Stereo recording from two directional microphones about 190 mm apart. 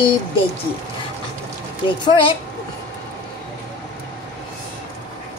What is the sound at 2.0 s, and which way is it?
Speech, 25° left (ahead or behind).